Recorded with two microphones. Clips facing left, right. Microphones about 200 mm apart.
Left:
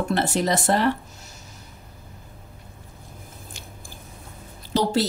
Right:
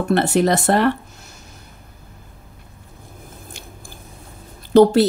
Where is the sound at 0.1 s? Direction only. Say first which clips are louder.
Right 8 dB; 60° right (ahead or behind).